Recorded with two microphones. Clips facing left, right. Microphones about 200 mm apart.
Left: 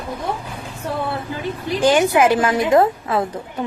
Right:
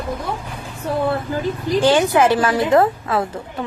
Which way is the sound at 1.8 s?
15° left (ahead or behind).